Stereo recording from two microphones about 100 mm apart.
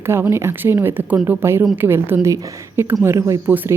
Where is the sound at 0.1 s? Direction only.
25° right (ahead or behind).